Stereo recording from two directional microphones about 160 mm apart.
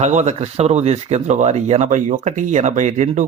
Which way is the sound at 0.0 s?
45° right (ahead or behind).